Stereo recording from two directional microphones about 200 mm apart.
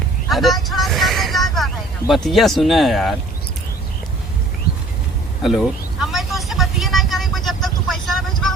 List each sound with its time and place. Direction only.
0.3 s vehicle: centre (ahead or behind)
4.7 s a sound: 50° left (ahead or behind)
5.4 s vehicle: centre (ahead or behind)